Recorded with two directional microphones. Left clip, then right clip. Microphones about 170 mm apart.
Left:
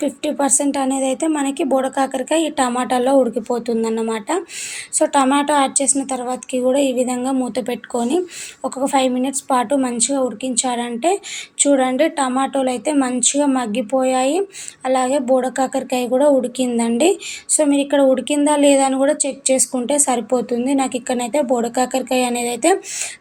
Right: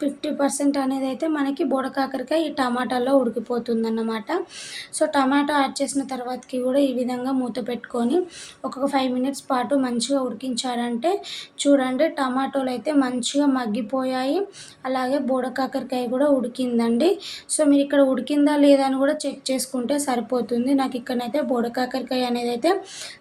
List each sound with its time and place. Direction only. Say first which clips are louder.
0.0 s speech: left 4 dB; 15° left (ahead or behind)